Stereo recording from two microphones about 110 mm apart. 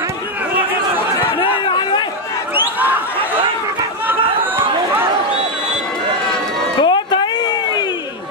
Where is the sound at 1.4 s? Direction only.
45° left (ahead or behind).